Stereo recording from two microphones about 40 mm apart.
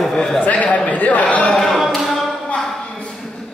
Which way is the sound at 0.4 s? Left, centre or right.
Left.